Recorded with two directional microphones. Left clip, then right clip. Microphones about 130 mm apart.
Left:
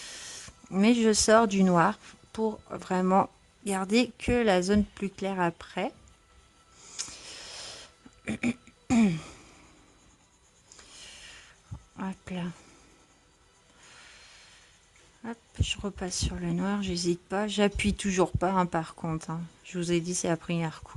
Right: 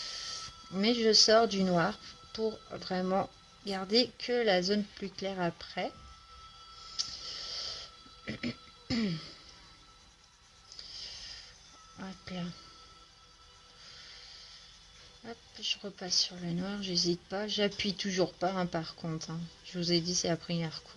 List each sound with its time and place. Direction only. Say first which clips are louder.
0.7 s a woman's voice: left 2 dB; 55° left (ahead or behind)
8.2 s a sound: left 7 dB; 65° left (ahead or behind)
11.9 s music: left 5 dB; 50° left (ahead or behind)
15.2 s a woman's voice: left 1 dB; 60° left (ahead or behind)
18.4 s speech: left 6 dB; 50° left (ahead or behind)
19.9 s a woman's voice: left 2 dB; 60° left (ahead or behind)